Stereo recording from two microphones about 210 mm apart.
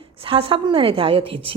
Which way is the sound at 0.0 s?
25° right (ahead or behind).